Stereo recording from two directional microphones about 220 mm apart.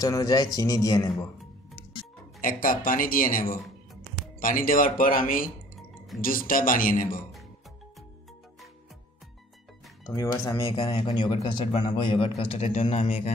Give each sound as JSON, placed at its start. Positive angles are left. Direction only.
{"t": 0.0, "sound": "speech", "side_deg": 15}
{"t": 2.4, "sound": "speech", "side_deg": 40}
{"t": 5.8, "sound": "drip", "side_deg": 0}
{"t": 6.2, "sound": "speech", "side_deg": 40}
{"t": 10.0, "sound": "speech", "side_deg": 15}
{"t": 10.8, "sound": "speech", "side_deg": 30}